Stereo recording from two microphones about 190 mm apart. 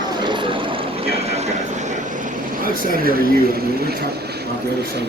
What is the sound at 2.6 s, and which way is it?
Speech, 50° right (ahead or behind).